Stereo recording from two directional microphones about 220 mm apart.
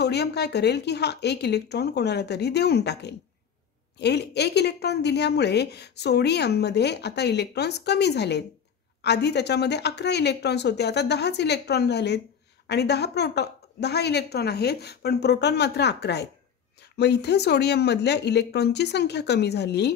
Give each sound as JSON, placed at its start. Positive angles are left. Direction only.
{"t": 0.0, "sound": "a woman's voice", "side_deg": 50}